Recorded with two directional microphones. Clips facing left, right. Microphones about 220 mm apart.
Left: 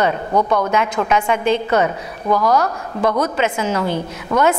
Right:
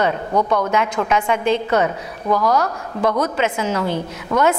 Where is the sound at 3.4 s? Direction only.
15° left (ahead or behind).